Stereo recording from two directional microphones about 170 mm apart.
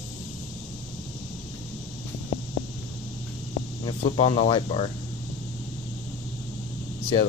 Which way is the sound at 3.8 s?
30° left (ahead or behind).